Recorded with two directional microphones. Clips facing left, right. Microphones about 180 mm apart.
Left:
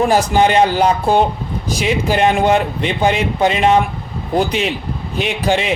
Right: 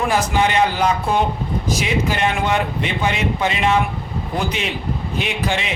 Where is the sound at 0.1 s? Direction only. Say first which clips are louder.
Left 5 dB; 35° left (ahead or behind).